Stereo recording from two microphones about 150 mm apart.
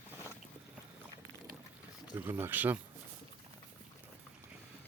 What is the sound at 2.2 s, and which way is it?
Speech, 15° right (ahead or behind).